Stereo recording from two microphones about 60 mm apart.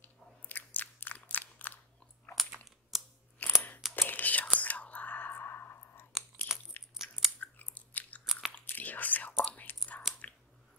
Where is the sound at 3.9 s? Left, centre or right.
Left.